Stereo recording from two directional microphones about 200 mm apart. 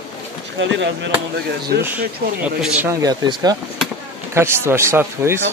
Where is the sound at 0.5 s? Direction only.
65° right (ahead or behind).